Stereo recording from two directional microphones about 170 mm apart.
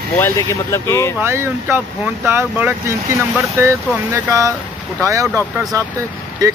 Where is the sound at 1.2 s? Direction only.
15° right (ahead or behind).